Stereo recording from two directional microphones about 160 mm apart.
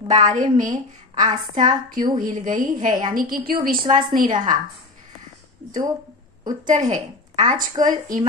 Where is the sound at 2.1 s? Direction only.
55° right (ahead or behind).